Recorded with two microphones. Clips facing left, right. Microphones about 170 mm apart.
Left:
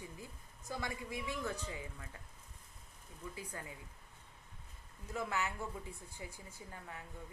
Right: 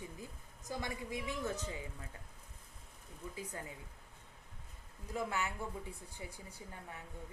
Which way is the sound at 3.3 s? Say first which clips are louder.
Right 4 dB; 20° right (ahead or behind).